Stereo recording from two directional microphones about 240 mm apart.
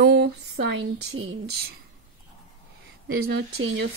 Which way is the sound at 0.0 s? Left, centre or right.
Right.